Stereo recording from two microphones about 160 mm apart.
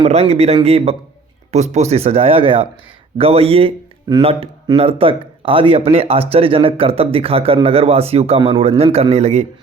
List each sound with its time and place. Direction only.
0.0 s speech: 40° right (ahead or behind)